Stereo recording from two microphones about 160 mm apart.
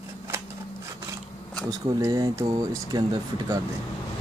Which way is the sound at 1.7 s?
25° right (ahead or behind).